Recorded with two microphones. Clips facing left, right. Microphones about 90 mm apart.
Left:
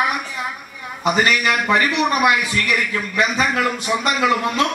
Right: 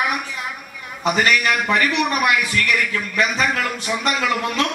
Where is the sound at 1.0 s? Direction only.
15° left (ahead or behind).